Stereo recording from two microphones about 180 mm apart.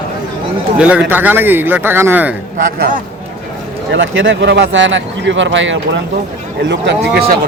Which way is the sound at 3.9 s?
90° right.